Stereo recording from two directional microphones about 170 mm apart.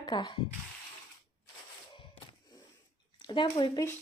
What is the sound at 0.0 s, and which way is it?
Speech, 25° left (ahead or behind).